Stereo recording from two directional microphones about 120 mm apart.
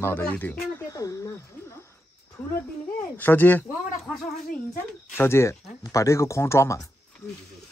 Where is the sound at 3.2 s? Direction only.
15° left (ahead or behind).